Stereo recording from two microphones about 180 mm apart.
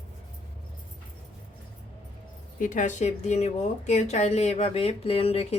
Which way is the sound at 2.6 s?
45° left (ahead or behind).